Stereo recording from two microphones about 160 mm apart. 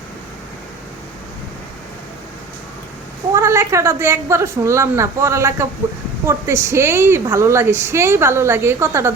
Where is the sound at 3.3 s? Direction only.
15° right (ahead or behind).